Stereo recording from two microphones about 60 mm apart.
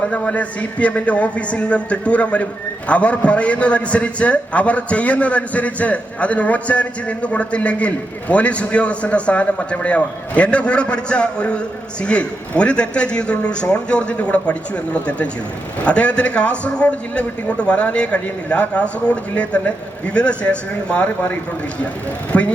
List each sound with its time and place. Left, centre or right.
0.1 s a man's voice: left
15.8 s a man's voice: left
22.3 s a man's voice: left